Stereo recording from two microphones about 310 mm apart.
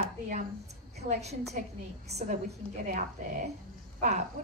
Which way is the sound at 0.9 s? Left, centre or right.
Right.